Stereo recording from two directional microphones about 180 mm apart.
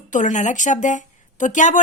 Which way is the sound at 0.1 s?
45° left (ahead or behind).